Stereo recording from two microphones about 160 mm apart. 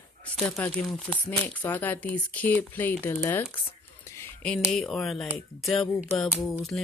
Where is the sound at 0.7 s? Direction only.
5° left (ahead or behind).